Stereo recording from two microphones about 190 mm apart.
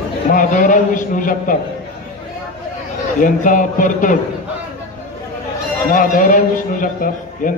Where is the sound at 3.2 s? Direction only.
45° left (ahead or behind).